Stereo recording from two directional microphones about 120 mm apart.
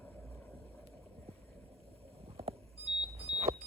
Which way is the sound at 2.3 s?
55° right (ahead or behind).